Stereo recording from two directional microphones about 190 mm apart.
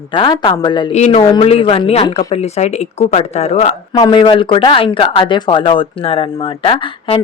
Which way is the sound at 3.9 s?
20° left (ahead or behind).